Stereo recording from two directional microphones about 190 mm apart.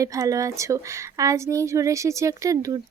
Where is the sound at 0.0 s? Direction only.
15° right (ahead or behind).